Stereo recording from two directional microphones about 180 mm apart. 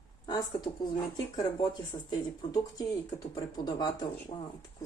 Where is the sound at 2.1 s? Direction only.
20° left (ahead or behind).